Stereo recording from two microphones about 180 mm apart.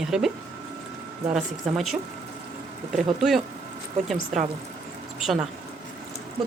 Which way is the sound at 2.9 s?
Centre (ahead or behind).